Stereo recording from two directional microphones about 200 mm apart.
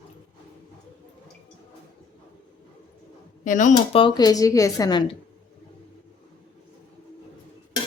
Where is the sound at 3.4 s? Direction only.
40° left (ahead or behind).